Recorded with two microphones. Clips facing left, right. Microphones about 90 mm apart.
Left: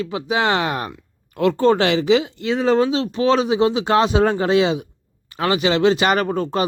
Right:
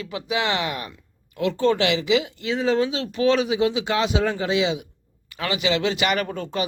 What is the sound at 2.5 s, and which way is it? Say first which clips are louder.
Speech: left 4 dB; 55° left (ahead or behind).